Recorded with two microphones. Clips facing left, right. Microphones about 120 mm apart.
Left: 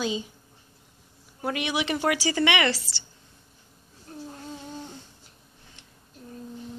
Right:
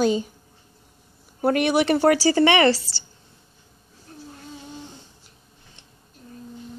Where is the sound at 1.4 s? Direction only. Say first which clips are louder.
Right 9 dB; 50° right (ahead or behind).